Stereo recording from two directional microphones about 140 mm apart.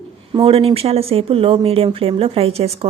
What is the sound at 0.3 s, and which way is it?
Speech, 40° right (ahead or behind).